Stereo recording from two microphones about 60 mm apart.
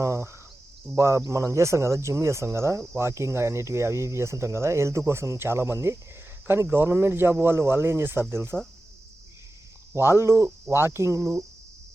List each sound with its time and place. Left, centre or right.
0.0 s speech: right
9.9 s speech: right